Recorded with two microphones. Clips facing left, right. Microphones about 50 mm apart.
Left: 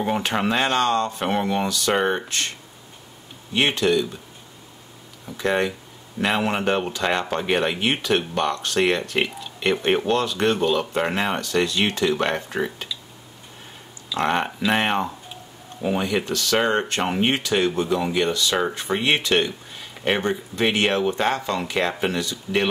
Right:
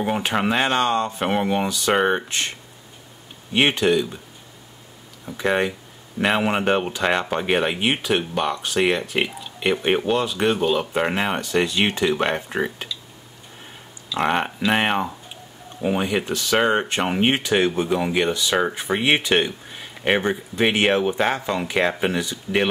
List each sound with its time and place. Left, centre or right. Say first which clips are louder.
0.0 s speech: right 1 dB; centre
3.5 s speech: right 2 dB; centre
5.2 s speech: right 1 dB; centre
14.1 s speech: right 1 dB; centre